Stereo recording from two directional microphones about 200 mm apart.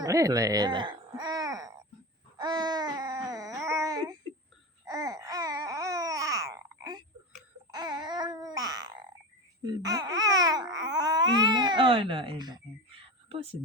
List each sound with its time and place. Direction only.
0.0 s speech: 15° right (ahead or behind)
2.4 s baby cry: 20° right (ahead or behind)
3.7 s a sound: 15° right (ahead or behind)
4.9 s babbling: 15° right (ahead or behind)
13.3 s speech: 30° right (ahead or behind)